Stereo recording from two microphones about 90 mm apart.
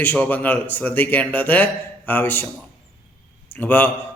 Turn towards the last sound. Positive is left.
turn(degrees=15)  # may be behind; listen again after turning